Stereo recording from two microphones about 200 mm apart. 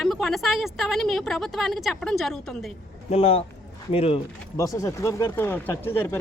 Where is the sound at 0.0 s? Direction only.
Centre (ahead or behind).